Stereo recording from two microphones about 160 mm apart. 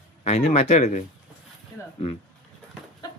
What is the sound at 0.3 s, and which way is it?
Speech, 45° left (ahead or behind).